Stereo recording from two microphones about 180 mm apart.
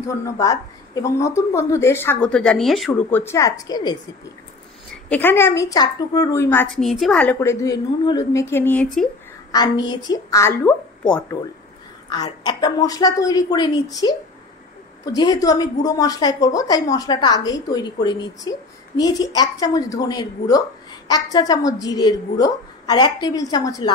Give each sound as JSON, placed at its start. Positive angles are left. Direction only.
{"t": 0.1, "sound": "a woman's voice", "side_deg": 15}
{"t": 5.1, "sound": "a woman's voice", "side_deg": 10}
{"t": 6.8, "sound": "a woman's voice", "side_deg": 0}
{"t": 9.5, "sound": "a woman's voice", "side_deg": 25}
{"t": 12.1, "sound": "a woman's voice", "side_deg": 25}